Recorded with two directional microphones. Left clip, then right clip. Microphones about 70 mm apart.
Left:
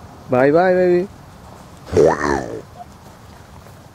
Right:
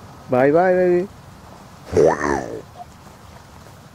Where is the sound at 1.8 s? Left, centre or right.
Left.